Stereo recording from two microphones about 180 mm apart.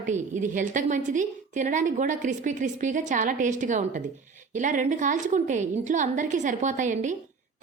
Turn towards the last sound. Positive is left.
turn(degrees=-45)  # may be behind; listen again after turning